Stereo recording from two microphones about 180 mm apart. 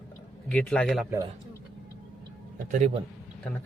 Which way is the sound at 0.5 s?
5° left (ahead or behind).